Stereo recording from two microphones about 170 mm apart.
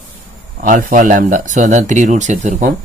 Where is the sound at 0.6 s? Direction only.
55° right (ahead or behind).